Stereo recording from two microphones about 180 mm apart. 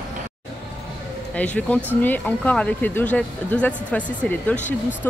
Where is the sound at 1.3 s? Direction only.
10° left (ahead or behind).